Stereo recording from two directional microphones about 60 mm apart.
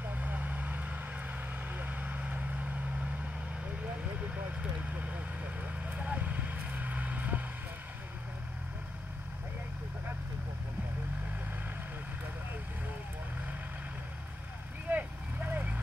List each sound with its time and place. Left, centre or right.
0.0 s vehicle: right
5.0 s vehicle: right
14.9 s vehicle: right